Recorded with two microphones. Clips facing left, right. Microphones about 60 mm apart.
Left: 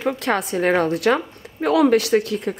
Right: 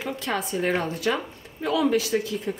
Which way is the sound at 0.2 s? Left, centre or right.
Left.